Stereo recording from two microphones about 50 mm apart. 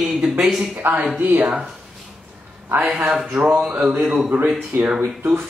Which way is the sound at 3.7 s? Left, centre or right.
Right.